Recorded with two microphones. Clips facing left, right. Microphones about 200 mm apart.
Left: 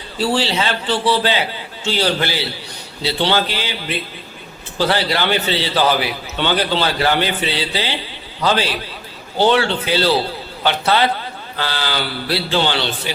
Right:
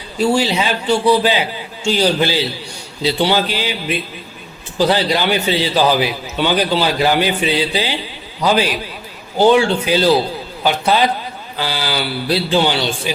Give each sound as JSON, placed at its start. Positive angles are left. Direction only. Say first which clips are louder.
{"t": 0.2, "sound": "a man's voice", "louder": "right 3 dB", "side_deg": -15}